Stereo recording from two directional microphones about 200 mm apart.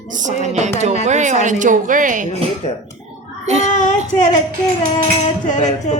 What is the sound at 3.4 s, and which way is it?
Speech, 35° right (ahead or behind).